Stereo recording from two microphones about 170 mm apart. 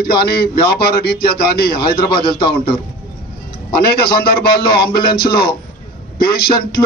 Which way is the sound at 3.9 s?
65° left (ahead or behind).